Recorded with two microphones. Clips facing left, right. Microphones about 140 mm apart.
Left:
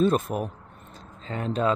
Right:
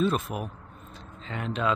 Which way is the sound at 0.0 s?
40° left (ahead or behind).